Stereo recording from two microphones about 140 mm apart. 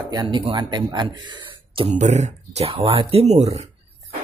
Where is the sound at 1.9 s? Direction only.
55° right (ahead or behind).